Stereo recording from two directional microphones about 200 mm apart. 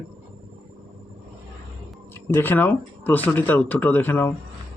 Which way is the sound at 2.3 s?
10° left (ahead or behind).